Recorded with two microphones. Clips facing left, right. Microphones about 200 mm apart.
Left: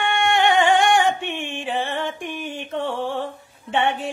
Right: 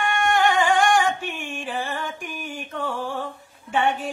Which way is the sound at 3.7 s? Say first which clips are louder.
Left 1 dB; 25° left (ahead or behind).